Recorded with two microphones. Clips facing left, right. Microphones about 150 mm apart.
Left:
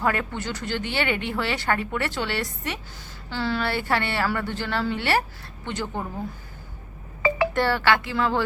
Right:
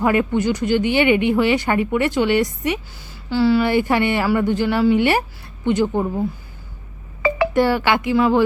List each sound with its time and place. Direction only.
0.0 s speech: 15° right (ahead or behind)
7.5 s speech: 15° right (ahead or behind)